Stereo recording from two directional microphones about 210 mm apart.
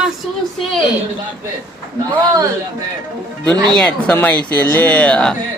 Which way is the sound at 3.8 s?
5° left (ahead or behind).